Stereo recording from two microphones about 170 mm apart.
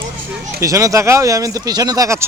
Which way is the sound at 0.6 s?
20° right (ahead or behind).